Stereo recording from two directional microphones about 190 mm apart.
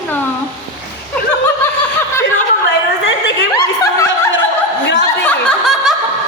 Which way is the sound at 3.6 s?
15° left (ahead or behind).